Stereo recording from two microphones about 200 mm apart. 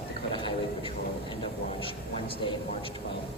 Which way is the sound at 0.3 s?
25° left (ahead or behind).